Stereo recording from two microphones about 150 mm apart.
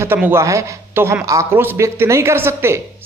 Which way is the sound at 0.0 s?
15° right (ahead or behind).